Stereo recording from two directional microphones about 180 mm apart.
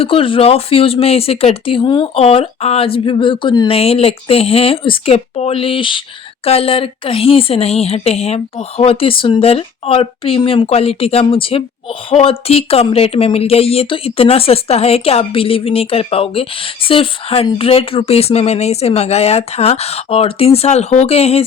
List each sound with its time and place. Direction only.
0.0 s a woman's voice: 30° left (ahead or behind)